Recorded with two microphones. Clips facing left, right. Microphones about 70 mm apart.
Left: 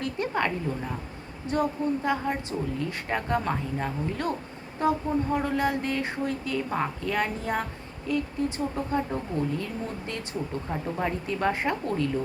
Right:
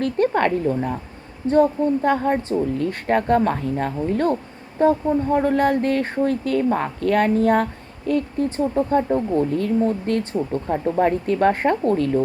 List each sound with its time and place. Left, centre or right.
0.0 s speech: right
1.5 s speech: right
10.7 s speech: right
11.3 s speech: right